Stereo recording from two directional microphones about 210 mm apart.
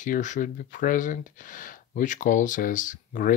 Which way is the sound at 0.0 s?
35° left (ahead or behind).